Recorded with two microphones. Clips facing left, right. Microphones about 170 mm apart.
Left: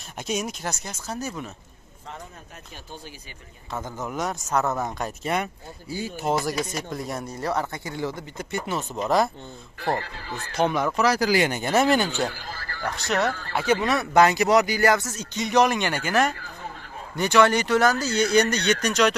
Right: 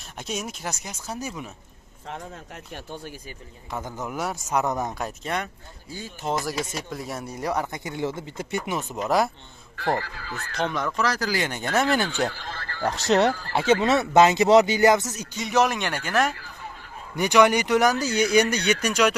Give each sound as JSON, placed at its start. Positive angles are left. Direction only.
{"t": 0.2, "sound": "speech", "side_deg": 0}
{"t": 2.0, "sound": "speech", "side_deg": -75}
{"t": 3.7, "sound": "speech", "side_deg": -15}
{"t": 5.0, "sound": "speech", "side_deg": 5}
{"t": 6.6, "sound": "speech", "side_deg": -5}
{"t": 8.7, "sound": "speech", "side_deg": -10}
{"t": 9.9, "sound": "speech", "side_deg": 20}
{"t": 10.6, "sound": "speech", "side_deg": 10}
{"t": 13.3, "sound": "speech", "side_deg": -35}
{"t": 15.3, "sound": "speech", "side_deg": -5}
{"t": 17.1, "sound": "speech", "side_deg": -15}